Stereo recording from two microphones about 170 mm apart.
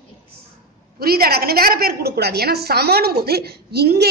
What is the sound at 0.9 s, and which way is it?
A woman's voice, 65° right (ahead or behind).